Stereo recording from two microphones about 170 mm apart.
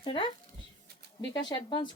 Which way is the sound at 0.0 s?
30° left (ahead or behind).